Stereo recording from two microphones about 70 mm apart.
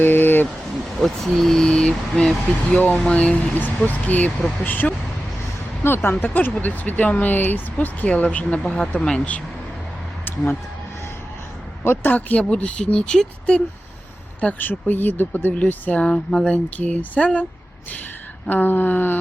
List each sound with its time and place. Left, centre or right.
0.0 s a sound: left
0.9 s speech: centre
10.2 s speech: left
11.8 s speech: left
14.6 s speech: left
18.4 s speech: left